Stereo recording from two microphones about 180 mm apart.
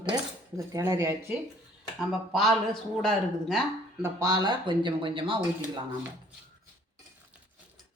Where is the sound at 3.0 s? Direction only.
5° left (ahead or behind).